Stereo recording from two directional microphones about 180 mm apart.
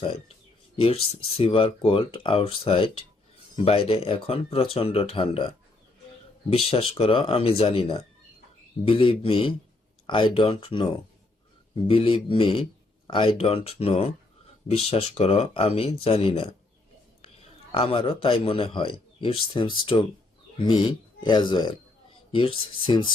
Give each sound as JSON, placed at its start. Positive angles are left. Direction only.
{"t": 0.8, "sound": "speech", "side_deg": 30}
{"t": 6.5, "sound": "a man's voice", "side_deg": 35}
{"t": 21.2, "sound": "speech", "side_deg": 25}